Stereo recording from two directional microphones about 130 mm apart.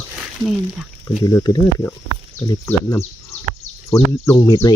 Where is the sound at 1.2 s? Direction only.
25° left (ahead or behind).